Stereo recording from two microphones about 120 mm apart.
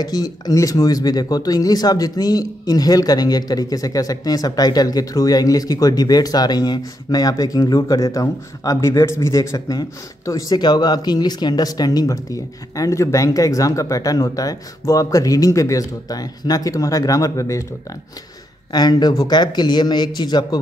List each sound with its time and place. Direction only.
0.0 s speech: 30° left (ahead or behind)
18.7 s speech: 35° left (ahead or behind)